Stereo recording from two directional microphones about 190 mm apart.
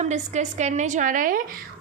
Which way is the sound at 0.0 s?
40° right (ahead or behind).